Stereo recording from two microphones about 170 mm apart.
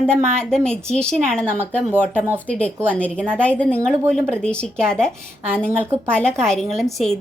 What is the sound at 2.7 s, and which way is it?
Speech, 10° right (ahead or behind).